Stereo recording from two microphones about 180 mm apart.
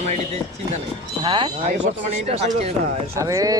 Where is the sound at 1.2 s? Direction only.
30° right (ahead or behind).